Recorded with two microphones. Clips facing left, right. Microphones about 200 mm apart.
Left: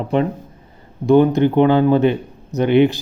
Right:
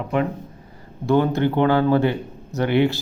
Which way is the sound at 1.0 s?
15° left (ahead or behind).